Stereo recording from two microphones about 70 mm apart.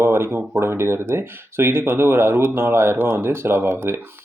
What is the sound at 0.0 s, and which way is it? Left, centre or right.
Speech, right.